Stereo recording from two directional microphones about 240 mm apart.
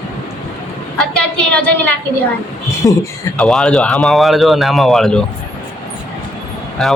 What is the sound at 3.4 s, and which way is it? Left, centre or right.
Speech, centre.